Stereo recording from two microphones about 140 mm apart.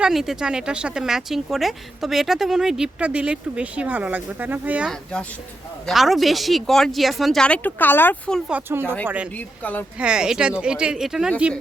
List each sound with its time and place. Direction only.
0.0 s speech: 5° right (ahead or behind); by 8.4 s 15° left (ahead or behind)
8.4 s speech: 15° right (ahead or behind)